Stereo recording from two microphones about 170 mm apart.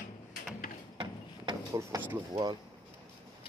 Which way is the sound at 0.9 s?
25° right (ahead or behind).